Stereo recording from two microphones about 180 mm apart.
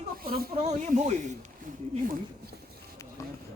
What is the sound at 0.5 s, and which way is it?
Speech, 40° right (ahead or behind).